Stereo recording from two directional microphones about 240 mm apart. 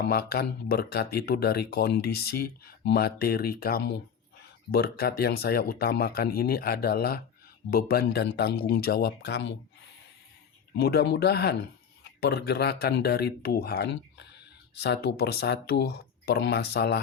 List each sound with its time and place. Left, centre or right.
0.0 s speech: left
10.8 s speech: left